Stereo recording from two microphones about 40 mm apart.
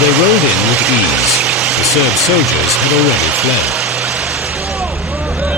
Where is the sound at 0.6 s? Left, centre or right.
Centre.